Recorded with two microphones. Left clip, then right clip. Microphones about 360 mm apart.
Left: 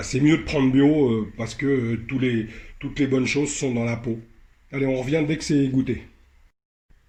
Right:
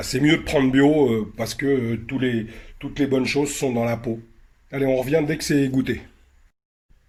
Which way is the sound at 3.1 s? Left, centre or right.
Right.